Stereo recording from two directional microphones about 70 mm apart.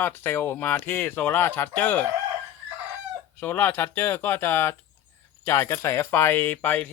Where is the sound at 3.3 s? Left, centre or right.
Left.